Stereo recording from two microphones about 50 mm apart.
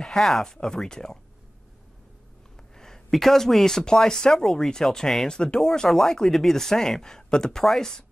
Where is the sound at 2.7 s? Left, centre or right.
Centre.